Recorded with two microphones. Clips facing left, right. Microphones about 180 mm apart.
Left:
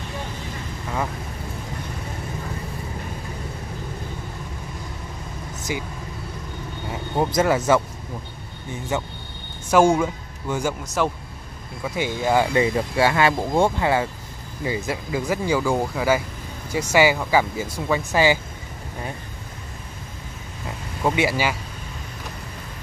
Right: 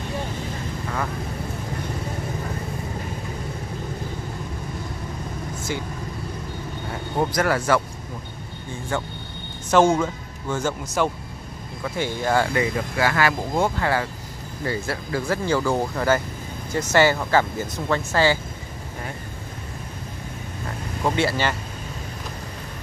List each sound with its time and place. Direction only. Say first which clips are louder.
7.2 s speech: left 3 dB; 20° left (ahead or behind)
8.9 s speech: left 1 dB; 20° left (ahead or behind)
11.0 s speech: even; centre (ahead or behind)
11.8 s speech: left 1 dB; 15° left (ahead or behind)
21.0 s speech: left 1 dB; 10° left (ahead or behind)